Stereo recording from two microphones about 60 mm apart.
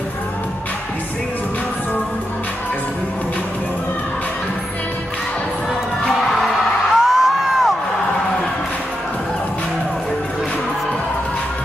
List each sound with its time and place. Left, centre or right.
6.9 s music: centre